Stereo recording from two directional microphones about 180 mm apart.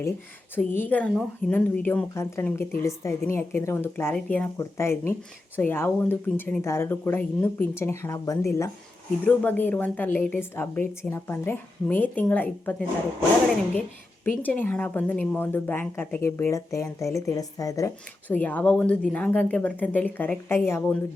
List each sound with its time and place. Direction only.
0.5 s a woman's voice: 10° left (ahead or behind)
14.3 s a woman's voice: 10° left (ahead or behind)